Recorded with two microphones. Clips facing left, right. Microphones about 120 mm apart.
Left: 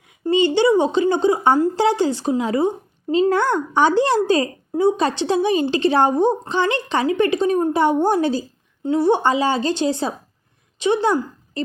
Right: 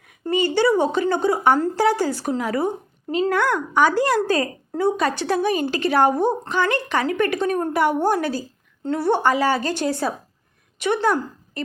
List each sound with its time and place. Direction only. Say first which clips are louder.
0.3 s a woman's voice: left 3 dB; 20° left (ahead or behind)